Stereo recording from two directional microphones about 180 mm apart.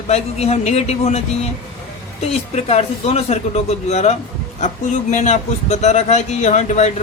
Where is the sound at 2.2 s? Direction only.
35° left (ahead or behind).